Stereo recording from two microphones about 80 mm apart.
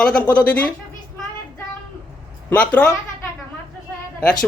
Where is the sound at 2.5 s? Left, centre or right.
Centre.